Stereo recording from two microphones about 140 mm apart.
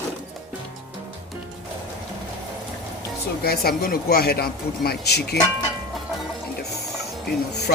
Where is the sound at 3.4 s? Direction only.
90° left.